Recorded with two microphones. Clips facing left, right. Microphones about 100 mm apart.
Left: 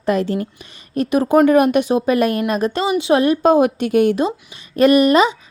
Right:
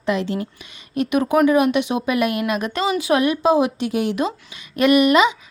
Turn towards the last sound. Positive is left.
turn(degrees=35)  # may be behind; listen again after turning